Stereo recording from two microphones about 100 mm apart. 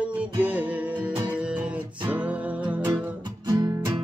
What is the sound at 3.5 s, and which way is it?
Music, 40° right (ahead or behind).